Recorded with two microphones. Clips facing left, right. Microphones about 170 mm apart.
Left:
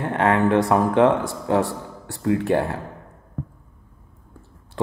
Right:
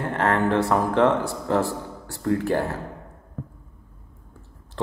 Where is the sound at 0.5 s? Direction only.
15° left (ahead or behind).